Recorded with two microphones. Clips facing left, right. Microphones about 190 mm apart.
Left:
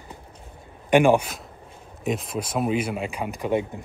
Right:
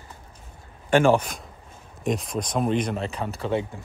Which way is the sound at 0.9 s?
15° left (ahead or behind).